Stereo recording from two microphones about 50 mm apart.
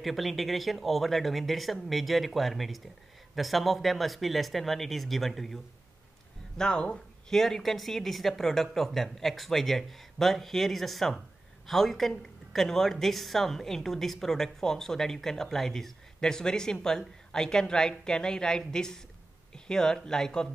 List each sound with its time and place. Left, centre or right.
0.0 s speech: centre
6.6 s speech: centre
7.3 s speech: centre